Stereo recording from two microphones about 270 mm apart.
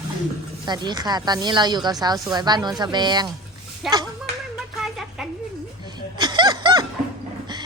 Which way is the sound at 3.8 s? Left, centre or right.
Centre.